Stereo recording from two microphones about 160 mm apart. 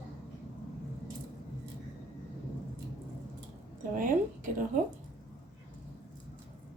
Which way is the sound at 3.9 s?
60° right (ahead or behind).